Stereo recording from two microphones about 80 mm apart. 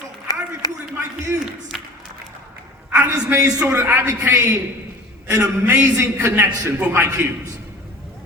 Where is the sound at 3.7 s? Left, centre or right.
Right.